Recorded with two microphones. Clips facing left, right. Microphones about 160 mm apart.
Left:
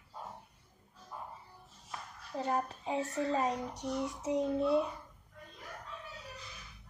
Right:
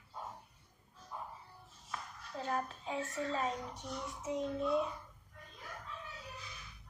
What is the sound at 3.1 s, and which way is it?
Child singing, 40° left (ahead or behind).